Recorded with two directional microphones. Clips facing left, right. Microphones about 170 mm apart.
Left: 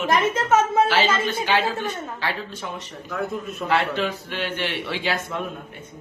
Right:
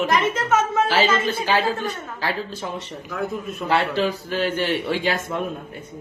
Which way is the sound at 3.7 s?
35° right (ahead or behind).